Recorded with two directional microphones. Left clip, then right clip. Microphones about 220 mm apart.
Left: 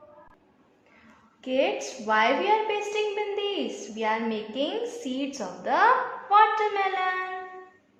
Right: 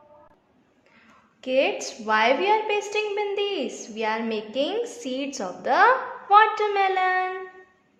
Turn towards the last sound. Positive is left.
turn(degrees=-50)  # may be behind; listen again after turning